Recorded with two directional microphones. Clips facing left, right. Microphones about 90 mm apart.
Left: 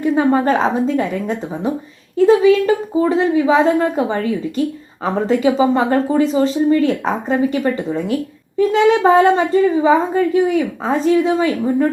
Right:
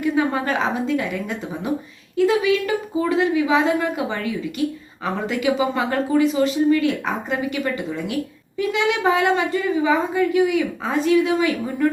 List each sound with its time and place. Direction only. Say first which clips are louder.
0.0 s a woman's voice: left 6 dB; 35° left (ahead or behind)